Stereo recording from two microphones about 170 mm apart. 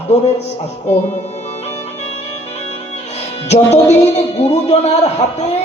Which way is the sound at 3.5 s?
40° left (ahead or behind).